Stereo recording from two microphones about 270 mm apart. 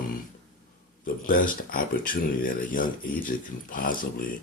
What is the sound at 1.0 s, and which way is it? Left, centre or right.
Speech, left.